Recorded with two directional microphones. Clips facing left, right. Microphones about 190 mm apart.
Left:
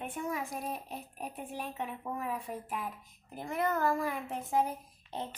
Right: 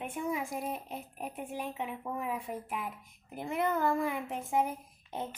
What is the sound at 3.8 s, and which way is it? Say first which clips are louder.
Speech: right 1 dB; 20° right (ahead or behind).